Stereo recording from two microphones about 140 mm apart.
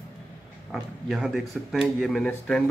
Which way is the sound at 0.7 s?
Centre (ahead or behind).